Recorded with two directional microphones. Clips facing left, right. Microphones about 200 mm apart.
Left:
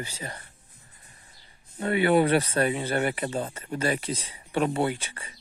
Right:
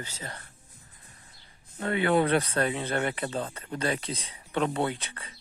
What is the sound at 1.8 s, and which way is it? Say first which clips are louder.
Speech: left 3 dB; 10° left (ahead or behind).